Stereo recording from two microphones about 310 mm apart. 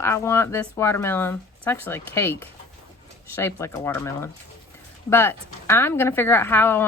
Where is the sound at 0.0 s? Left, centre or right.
Centre.